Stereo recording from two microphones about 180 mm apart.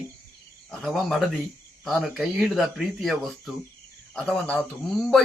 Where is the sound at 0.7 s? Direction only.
5° left (ahead or behind).